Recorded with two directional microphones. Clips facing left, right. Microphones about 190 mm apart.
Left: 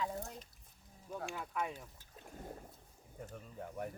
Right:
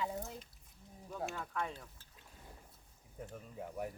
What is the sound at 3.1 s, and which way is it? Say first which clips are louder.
Speech: right 1 dB; centre (ahead or behind).